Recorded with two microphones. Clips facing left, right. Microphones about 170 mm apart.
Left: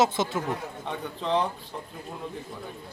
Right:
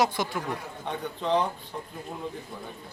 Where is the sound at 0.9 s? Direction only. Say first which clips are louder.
Right 1 dB; centre (ahead or behind).